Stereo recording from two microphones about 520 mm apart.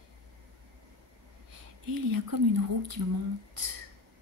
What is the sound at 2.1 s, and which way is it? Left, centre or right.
Speech, right.